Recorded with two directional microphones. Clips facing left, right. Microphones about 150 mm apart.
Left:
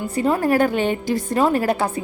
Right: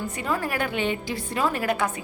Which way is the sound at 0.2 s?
35° left (ahead or behind).